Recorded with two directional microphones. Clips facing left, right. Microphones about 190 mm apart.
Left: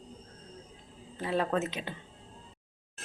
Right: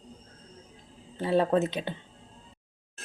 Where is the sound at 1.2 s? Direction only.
30° right (ahead or behind).